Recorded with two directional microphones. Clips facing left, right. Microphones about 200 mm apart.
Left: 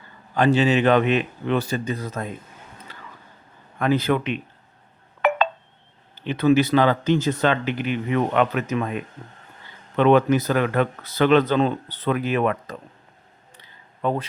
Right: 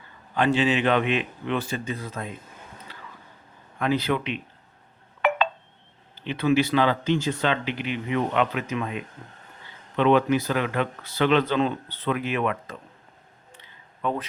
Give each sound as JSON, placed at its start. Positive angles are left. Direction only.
{"t": 0.3, "sound": "speech", "side_deg": 40}
{"t": 2.9, "sound": "a sound", "side_deg": 45}
{"t": 3.8, "sound": "speech", "side_deg": 50}
{"t": 5.2, "sound": "telephone dialing", "side_deg": 45}
{"t": 6.1, "sound": "speech", "side_deg": 45}
{"t": 13.6, "sound": "a sound", "side_deg": 35}